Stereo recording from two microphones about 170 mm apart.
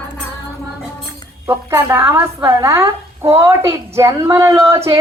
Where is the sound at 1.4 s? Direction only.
15° right (ahead or behind).